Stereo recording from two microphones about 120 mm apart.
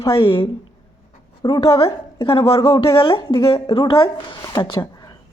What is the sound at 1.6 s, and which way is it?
A woman's voice, 50° left (ahead or behind).